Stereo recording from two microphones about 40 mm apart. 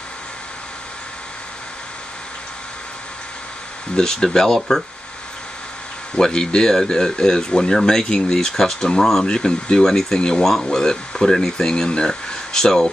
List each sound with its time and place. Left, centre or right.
3.9 s speech: centre
6.1 s speech: centre
9.3 s speech: centre